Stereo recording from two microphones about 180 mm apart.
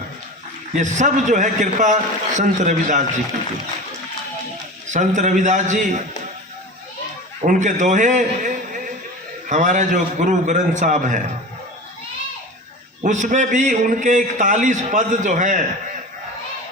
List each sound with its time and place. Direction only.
0.8 s a man's voice: 40° right (ahead or behind)
4.9 s a man's voice: 40° right (ahead or behind)
7.4 s a man's voice: 45° right (ahead or behind)
13.0 s a man's voice: 45° right (ahead or behind)